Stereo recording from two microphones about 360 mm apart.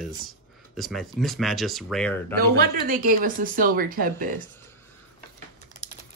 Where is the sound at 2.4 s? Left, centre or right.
Right.